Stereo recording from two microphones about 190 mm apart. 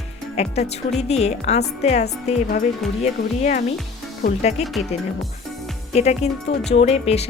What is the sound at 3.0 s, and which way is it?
Speech, 35° left (ahead or behind).